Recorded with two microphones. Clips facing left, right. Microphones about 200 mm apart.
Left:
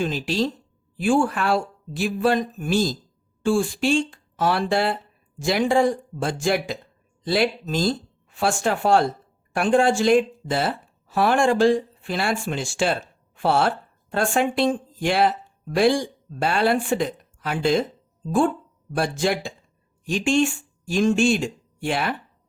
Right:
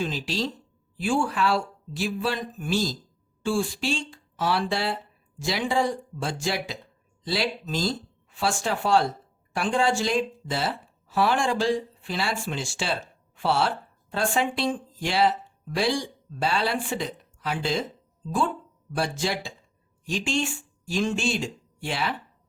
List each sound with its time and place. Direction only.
0.0 s a woman's voice: 55° left (ahead or behind)